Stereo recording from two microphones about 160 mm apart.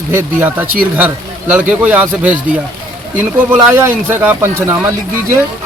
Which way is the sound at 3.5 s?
15° right (ahead or behind).